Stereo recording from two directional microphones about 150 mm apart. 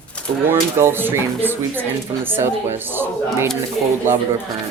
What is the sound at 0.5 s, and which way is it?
Speech, 15° right (ahead or behind).